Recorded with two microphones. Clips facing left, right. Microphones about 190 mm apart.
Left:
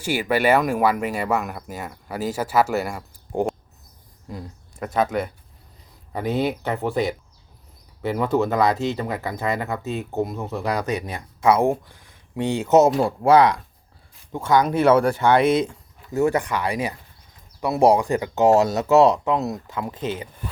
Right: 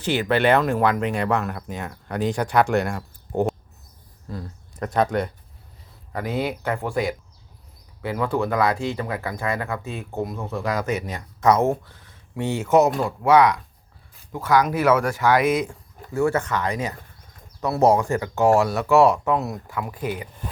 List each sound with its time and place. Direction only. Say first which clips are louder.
0.0 s speech: right 1 dB; 10° left (ahead or behind)
4.8 s speech: right 1 dB; 5° left (ahead or behind)
6.1 s speech: left 3 dB; 20° left (ahead or behind)
16.1 s speech: left 1 dB; 15° left (ahead or behind)